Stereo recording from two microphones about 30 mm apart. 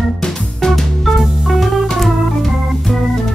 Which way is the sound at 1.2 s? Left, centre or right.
Centre.